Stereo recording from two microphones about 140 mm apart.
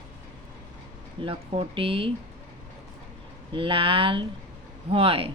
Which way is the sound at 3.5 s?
40° right (ahead or behind).